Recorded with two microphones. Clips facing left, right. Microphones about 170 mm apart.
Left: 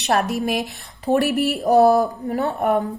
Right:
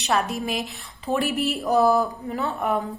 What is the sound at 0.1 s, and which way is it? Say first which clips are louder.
A woman's voice: left 4 dB; 65° left (ahead or behind).